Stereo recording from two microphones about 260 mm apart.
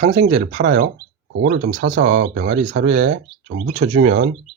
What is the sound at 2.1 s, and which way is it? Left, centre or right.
Speech, right.